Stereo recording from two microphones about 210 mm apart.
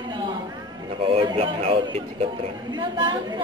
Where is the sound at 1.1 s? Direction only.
25° right (ahead or behind).